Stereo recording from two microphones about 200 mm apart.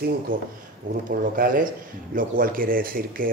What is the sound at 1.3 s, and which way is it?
A man's voice, 45° right (ahead or behind).